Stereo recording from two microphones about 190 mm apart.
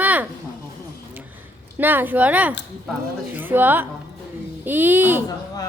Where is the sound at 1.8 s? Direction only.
10° right (ahead or behind).